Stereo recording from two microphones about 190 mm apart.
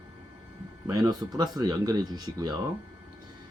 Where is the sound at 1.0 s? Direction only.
20° right (ahead or behind).